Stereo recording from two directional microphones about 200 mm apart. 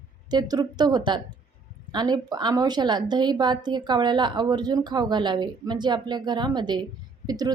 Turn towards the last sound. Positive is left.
turn(degrees=-20)  # may be behind; listen again after turning